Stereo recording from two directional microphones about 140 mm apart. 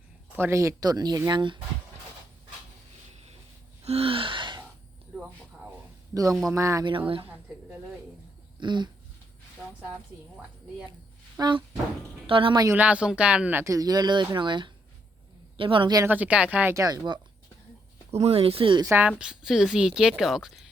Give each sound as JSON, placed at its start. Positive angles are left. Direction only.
{"t": 0.3, "sound": "speech", "side_deg": -20}
{"t": 3.8, "sound": "gasp", "side_deg": -45}
{"t": 6.5, "sound": "speech", "side_deg": -20}
{"t": 8.5, "sound": "a sound", "side_deg": -35}
{"t": 11.3, "sound": "speech", "side_deg": -30}
{"t": 12.6, "sound": "speech", "side_deg": -10}
{"t": 16.0, "sound": "speech", "side_deg": -10}
{"t": 18.1, "sound": "speech", "side_deg": -45}
{"t": 18.9, "sound": "speech", "side_deg": -15}